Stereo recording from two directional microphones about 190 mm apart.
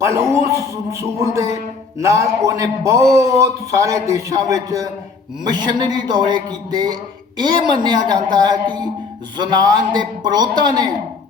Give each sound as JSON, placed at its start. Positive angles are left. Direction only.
{"t": 0.0, "sound": "a man's voice", "side_deg": -15}